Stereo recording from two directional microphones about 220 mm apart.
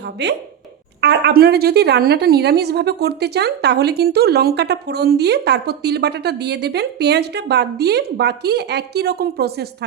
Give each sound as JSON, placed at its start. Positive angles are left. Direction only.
{"t": 0.0, "sound": "a woman's voice", "side_deg": -50}